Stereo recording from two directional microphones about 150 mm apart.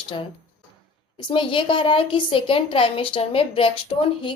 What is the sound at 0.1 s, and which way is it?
A woman's voice, 35° left (ahead or behind).